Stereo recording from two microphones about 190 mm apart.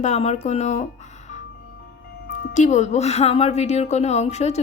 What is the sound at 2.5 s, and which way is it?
A woman's voice, 40° left (ahead or behind).